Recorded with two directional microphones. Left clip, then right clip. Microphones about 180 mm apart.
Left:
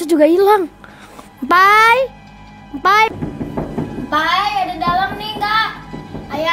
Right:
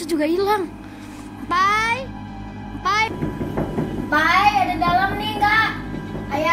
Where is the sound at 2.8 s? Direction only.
45° left (ahead or behind).